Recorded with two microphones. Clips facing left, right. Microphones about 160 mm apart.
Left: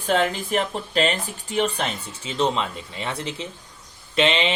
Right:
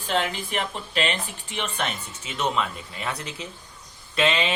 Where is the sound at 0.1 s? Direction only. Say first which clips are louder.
Left 5 dB; 45° left (ahead or behind).